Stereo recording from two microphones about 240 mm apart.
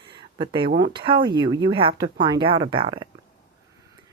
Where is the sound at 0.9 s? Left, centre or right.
Right.